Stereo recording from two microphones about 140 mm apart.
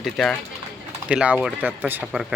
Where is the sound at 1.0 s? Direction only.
10° right (ahead or behind).